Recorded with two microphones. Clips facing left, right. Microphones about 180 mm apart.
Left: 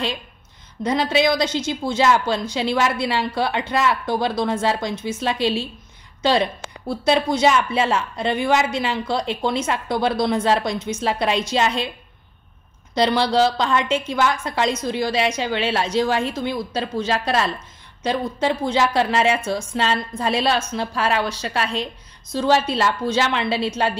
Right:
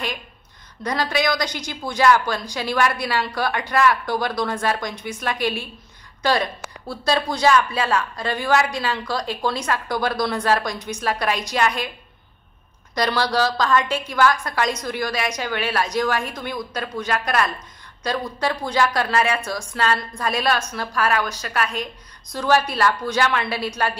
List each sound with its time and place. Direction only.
0.8 s speech: 25° left (ahead or behind)
12.9 s speech: 25° left (ahead or behind)